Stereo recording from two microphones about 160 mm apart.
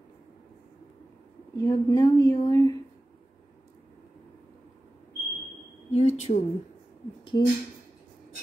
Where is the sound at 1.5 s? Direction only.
20° left (ahead or behind).